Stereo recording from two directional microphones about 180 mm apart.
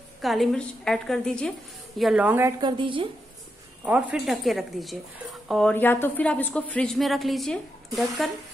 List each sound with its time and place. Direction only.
0.2 s a woman's voice: centre (ahead or behind)
2.6 s a woman's voice: 30° right (ahead or behind)
3.8 s speech: 5° right (ahead or behind)